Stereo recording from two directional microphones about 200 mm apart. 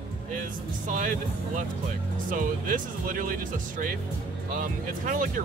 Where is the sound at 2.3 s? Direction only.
45° right (ahead or behind).